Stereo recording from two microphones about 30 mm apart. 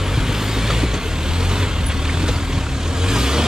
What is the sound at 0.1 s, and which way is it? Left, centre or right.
Vehicle, centre.